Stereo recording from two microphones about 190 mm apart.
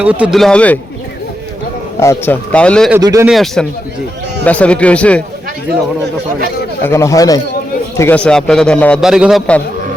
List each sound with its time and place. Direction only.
0.0 s a man's voice: 5° right (ahead or behind)
2.0 s a man's voice: 10° left (ahead or behind)
3.0 s speech: 20° right (ahead or behind)
3.2 s a man's voice: centre (ahead or behind)
6.8 s a man's voice: 15° left (ahead or behind); by 9.4 s 5° right (ahead or behind)